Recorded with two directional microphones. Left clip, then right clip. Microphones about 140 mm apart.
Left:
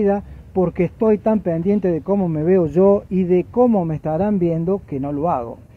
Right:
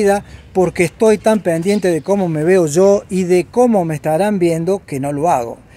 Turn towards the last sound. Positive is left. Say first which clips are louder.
# right 6 dB
turn(degrees=-15)  # may be behind; listen again after turning